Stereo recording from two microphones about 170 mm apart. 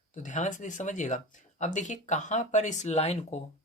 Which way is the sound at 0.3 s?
45° left (ahead or behind).